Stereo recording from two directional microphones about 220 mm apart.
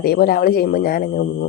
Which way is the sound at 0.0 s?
45° left (ahead or behind).